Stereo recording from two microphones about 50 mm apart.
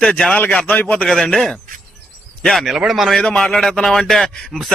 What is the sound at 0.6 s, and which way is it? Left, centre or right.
Speech, left.